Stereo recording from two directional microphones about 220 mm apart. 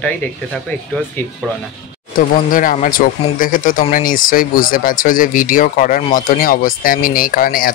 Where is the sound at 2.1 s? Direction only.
40° left (ahead or behind).